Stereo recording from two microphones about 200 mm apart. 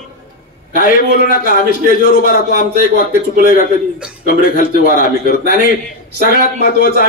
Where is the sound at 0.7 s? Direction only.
45° left (ahead or behind).